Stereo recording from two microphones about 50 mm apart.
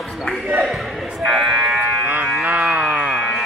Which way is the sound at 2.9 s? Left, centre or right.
Centre.